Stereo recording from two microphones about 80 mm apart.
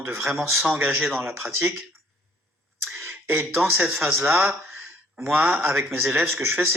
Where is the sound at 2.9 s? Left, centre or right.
Right.